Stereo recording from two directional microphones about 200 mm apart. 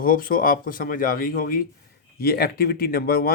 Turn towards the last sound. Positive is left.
turn(degrees=50)  # may be behind; listen again after turning